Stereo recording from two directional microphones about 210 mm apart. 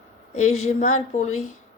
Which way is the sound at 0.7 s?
35° left (ahead or behind).